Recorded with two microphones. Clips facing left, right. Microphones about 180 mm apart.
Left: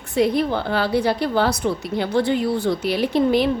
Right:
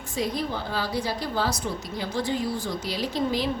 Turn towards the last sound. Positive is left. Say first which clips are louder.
# left 8 dB
turn(degrees=60)  # may be behind; listen again after turning